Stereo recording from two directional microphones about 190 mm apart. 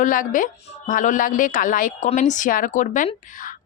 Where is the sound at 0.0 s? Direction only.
45° left (ahead or behind).